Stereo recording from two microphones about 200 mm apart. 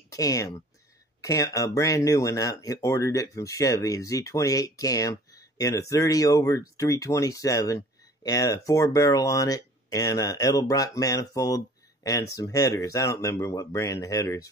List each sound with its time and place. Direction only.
0.1 s speech: 15° left (ahead or behind)